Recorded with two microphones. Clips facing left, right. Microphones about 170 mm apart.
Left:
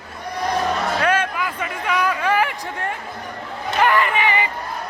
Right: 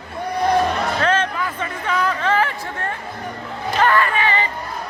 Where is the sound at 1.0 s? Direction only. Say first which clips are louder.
Right 1 dB; 10° left (ahead or behind).